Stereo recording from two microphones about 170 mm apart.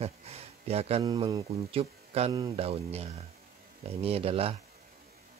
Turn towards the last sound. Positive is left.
turn(degrees=-35)  # may be behind; listen again after turning